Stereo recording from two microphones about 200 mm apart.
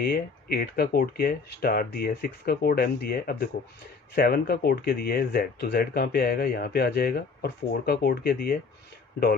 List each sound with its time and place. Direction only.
0.0 s speech: 50° left (ahead or behind)